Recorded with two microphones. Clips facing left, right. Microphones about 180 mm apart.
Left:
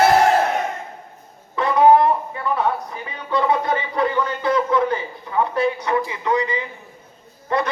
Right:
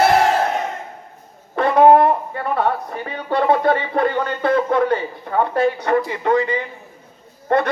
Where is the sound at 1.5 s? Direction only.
60° right (ahead or behind).